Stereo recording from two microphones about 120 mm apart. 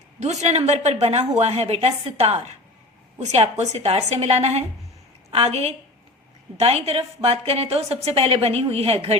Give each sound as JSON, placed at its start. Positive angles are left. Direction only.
{"t": 0.2, "sound": "a woman's voice", "side_deg": -70}